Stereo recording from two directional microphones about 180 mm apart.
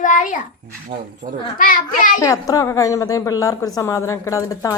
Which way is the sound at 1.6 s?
50° left (ahead or behind).